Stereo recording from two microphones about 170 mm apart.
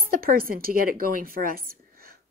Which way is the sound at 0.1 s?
60° right (ahead or behind).